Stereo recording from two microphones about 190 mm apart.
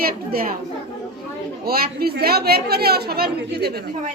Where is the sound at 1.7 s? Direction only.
55° right (ahead or behind).